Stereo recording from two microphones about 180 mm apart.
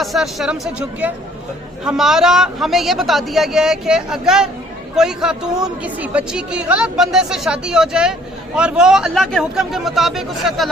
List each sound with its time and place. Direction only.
0.0 s speech: centre (ahead or behind)